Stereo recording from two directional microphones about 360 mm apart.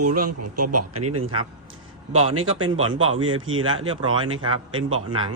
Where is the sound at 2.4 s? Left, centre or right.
Right.